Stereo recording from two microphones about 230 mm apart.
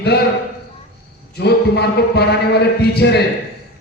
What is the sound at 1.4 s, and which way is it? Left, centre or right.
A man's voice, left.